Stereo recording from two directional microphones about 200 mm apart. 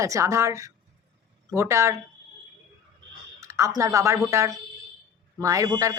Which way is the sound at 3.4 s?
15° right (ahead or behind).